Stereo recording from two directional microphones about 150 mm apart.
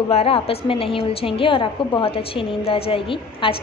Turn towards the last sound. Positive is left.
turn(degrees=40)  # may be behind; listen again after turning